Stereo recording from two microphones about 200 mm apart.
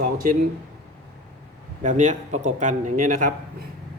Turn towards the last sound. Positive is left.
turn(degrees=-45)  # may be behind; listen again after turning